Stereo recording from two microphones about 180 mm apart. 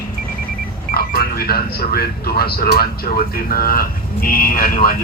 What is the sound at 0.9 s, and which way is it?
Speech, 55° left (ahead or behind).